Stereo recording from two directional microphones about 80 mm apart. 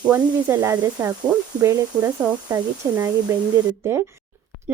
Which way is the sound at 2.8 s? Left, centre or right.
Right.